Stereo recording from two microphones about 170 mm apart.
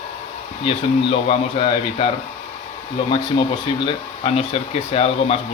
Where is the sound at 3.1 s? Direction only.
30° left (ahead or behind).